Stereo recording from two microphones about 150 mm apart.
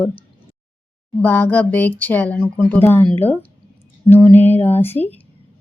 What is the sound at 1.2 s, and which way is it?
A woman's voice, 10° left (ahead or behind).